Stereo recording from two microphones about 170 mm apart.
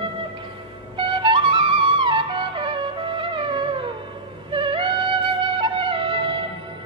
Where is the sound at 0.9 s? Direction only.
30° right (ahead or behind).